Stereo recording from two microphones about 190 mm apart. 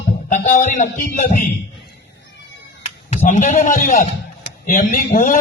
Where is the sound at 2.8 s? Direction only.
35° left (ahead or behind).